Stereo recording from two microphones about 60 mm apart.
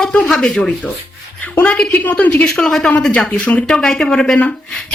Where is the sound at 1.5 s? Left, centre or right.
Left.